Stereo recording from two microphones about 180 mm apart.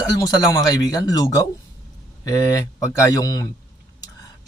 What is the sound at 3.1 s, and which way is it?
Speech, 20° left (ahead or behind).